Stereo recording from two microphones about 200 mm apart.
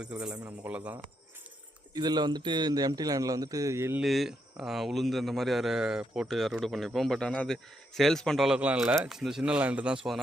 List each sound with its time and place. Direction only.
0.0 s a man's voice: 5° right (ahead or behind)
1.9 s a man's voice: 20° right (ahead or behind)
4.0 s a man's voice: centre (ahead or behind)